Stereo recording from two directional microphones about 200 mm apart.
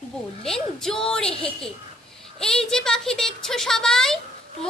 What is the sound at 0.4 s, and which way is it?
Speech, centre (ahead or behind).